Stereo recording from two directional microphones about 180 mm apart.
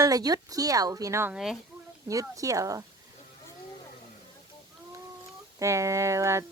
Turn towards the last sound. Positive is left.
turn(degrees=-15)  # may be behind; listen again after turning